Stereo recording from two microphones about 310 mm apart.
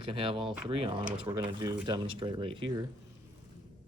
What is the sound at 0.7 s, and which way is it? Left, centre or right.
Speech, centre.